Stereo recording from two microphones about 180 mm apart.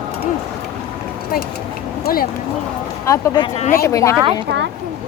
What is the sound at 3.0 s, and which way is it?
Speech, 15° left (ahead or behind).